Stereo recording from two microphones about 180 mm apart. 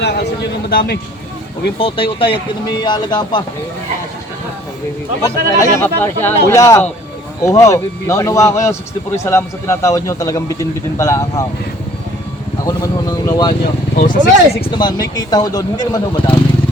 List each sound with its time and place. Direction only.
0.0 s a sound: 70° left (ahead or behind)
0.7 s speech: 60° left (ahead or behind)
1.8 s speech: 30° left (ahead or behind)
5.2 s a man's voice: 15° left (ahead or behind)
12.6 s vehicle: 20° left (ahead or behind)
13.9 s speech: 45° left (ahead or behind)
14.6 s speech: 25° left (ahead or behind)